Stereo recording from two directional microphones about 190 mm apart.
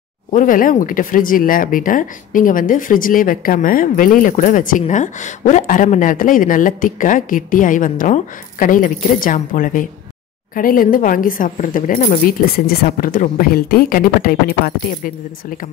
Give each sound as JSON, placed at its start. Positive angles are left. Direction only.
{"t": 0.3, "sound": "speech", "side_deg": 45}